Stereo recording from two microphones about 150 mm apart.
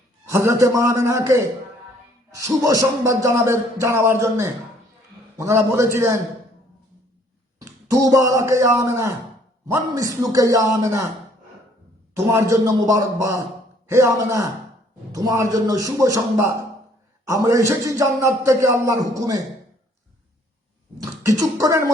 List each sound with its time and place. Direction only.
0.3 s speech: 20° right (ahead or behind)
7.6 s speech: 20° right (ahead or behind)
12.1 s speech: 20° right (ahead or behind)
21.0 s speech: 25° right (ahead or behind)